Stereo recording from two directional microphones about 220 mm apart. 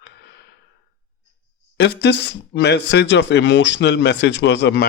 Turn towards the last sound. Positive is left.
turn(degrees=50)  # may be behind; listen again after turning